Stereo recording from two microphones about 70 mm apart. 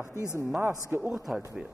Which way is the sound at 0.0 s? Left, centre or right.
Left.